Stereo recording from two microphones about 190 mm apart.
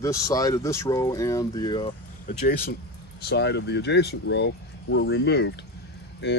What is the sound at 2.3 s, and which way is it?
Speech, 55° left (ahead or behind).